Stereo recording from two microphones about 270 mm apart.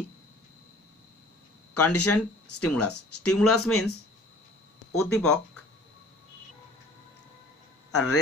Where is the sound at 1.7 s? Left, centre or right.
Left.